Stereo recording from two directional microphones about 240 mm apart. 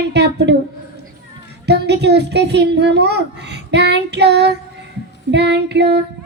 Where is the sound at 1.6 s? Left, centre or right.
Right.